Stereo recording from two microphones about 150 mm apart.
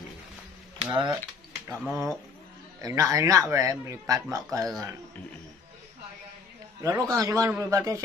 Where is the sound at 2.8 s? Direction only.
20° right (ahead or behind).